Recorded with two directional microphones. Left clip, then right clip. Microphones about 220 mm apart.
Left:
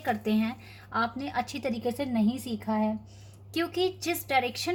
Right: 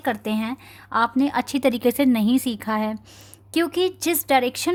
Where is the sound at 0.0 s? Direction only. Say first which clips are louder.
Right 4 dB; 50° right (ahead or behind).